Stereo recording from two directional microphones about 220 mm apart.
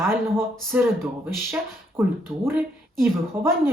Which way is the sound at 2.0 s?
10° right (ahead or behind).